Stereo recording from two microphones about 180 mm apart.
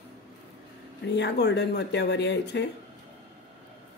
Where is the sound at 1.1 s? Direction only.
70° left (ahead or behind).